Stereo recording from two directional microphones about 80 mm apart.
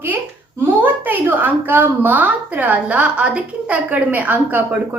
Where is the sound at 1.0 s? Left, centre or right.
Right.